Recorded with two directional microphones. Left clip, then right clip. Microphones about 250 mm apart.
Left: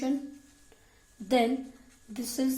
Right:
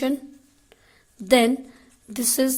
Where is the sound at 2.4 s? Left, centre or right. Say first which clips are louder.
Right 8 dB; right.